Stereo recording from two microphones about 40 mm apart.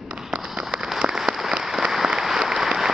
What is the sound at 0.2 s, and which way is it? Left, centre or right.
Fireworks, centre.